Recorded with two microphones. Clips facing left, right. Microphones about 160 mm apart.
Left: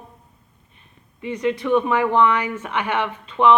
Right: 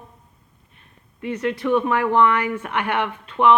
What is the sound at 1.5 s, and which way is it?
A woman's voice, 5° right (ahead or behind).